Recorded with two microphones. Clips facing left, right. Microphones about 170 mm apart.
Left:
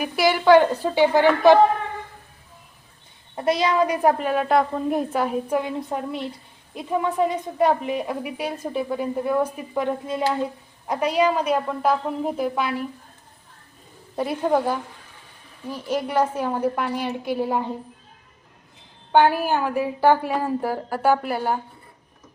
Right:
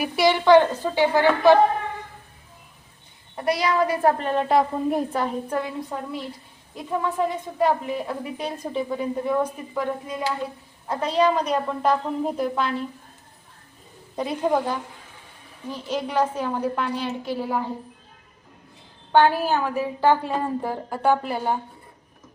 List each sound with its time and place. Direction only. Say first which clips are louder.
0.0 s a woman's voice: even; 5° left (ahead or behind)
3.3 s a woman's voice: left 2 dB; 20° left (ahead or behind); by 9.5 s 5° left (ahead or behind)
9.7 s stir: left 3 dB; 20° left (ahead or behind)
10.8 s a woman's voice: left 1 dB; 10° left (ahead or behind)
14.2 s a woman's voice: left 1 dB; 5° left (ahead or behind)
19.1 s a woman's voice: left 1 dB; 10° left (ahead or behind)